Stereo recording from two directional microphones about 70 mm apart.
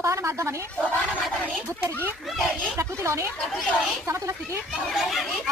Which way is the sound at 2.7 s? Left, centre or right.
Right.